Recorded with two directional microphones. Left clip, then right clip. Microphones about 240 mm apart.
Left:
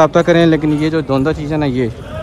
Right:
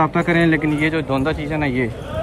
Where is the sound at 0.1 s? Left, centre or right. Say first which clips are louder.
Left 6 dB; left.